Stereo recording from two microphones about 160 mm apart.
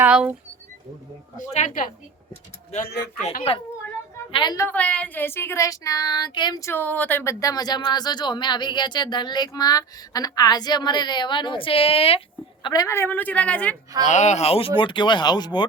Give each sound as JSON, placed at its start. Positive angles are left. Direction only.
{"t": 0.0, "sound": "speech", "side_deg": -10}
{"t": 1.5, "sound": "speech", "side_deg": 55}
{"t": 2.8, "sound": "speech", "side_deg": 90}
{"t": 3.5, "sound": "a woman's voice", "side_deg": 40}
{"t": 4.5, "sound": "female singing", "side_deg": 10}
{"t": 12.6, "sound": "a woman's voice", "side_deg": 25}
{"t": 14.0, "sound": "speech", "side_deg": 50}
{"t": 14.8, "sound": "female singing", "side_deg": 30}